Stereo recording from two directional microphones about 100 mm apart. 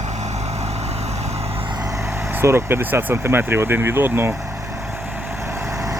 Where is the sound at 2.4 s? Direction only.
25° right (ahead or behind).